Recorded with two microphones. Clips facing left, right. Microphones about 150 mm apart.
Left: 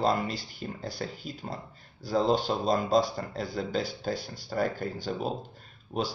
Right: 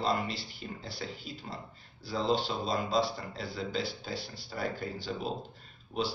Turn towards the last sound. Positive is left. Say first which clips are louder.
# left 2 dB
turn(degrees=45)  # may be behind; listen again after turning